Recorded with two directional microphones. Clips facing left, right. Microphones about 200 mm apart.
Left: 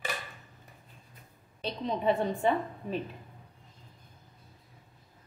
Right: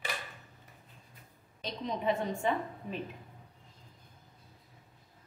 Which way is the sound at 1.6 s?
30° left (ahead or behind).